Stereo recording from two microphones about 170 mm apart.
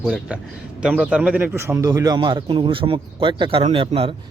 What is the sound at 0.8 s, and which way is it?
Speech, 5° right (ahead or behind).